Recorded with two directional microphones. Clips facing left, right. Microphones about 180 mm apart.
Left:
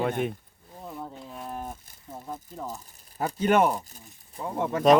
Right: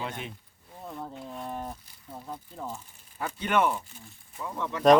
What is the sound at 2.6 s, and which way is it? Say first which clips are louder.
Speech: left 1 dB; 40° left (ahead or behind).